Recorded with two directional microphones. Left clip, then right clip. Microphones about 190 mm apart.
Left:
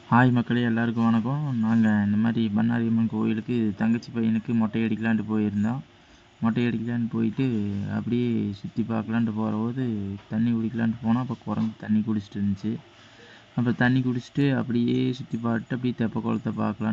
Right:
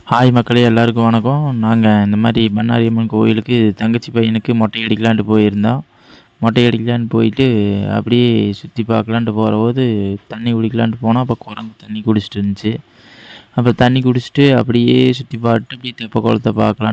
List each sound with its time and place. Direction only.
0.1 s speech: 50° right (ahead or behind)